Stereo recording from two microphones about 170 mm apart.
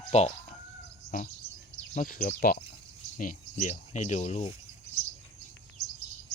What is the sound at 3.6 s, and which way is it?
Speech, 45° left (ahead or behind).